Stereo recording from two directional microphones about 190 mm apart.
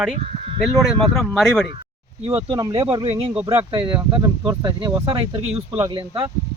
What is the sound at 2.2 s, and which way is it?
Speech, 30° right (ahead or behind).